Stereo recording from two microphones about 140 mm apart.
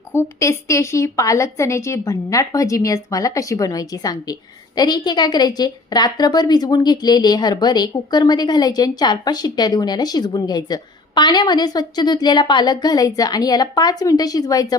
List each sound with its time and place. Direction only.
0.1 s a woman's voice: 20° left (ahead or behind)